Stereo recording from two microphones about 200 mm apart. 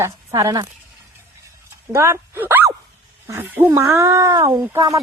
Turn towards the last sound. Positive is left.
turn(degrees=-15)  # may be behind; listen again after turning